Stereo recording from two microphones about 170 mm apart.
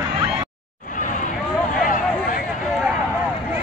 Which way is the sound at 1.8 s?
55° left (ahead or behind).